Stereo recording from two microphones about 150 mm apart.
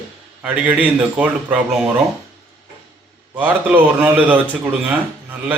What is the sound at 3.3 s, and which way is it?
A man's voice, 10° right (ahead or behind).